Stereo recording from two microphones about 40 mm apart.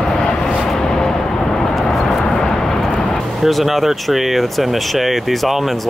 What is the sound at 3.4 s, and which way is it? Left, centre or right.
Speech, centre.